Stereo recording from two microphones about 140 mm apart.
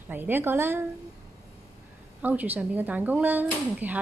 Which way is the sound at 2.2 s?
10° right (ahead or behind).